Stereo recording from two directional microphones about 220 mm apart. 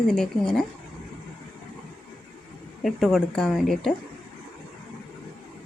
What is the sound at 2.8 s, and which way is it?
A woman's voice, centre (ahead or behind).